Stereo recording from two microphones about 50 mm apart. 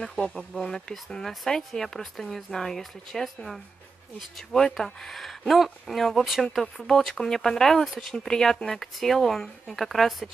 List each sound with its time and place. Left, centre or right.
0.0 s speech: centre